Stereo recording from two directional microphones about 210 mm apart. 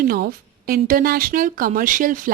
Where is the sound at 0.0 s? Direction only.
45° right (ahead or behind).